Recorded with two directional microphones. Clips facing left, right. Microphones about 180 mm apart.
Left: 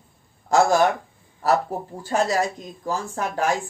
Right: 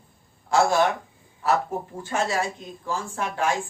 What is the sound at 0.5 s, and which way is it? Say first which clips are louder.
Speech: left 3 dB; 40° left (ahead or behind).